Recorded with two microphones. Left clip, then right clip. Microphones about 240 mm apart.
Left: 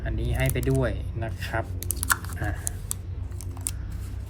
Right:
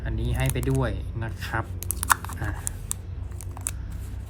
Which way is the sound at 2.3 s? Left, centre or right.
Centre.